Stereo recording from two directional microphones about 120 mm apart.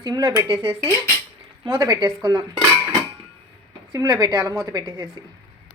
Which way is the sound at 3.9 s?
35° right (ahead or behind).